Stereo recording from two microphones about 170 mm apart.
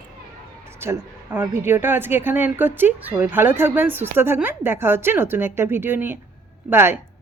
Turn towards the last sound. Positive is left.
turn(degrees=-15)  # may be behind; listen again after turning